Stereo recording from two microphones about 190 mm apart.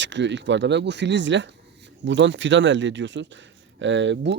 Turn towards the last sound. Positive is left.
turn(degrees=-70)  # may be behind; listen again after turning